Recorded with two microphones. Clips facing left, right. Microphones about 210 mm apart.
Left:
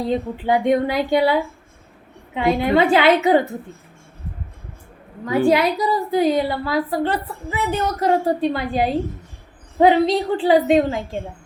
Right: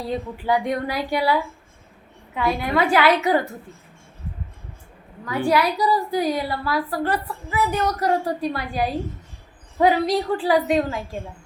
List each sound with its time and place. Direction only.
0.0 s a woman's voice: 20° left (ahead or behind)
5.5 s a woman's voice: 20° left (ahead or behind)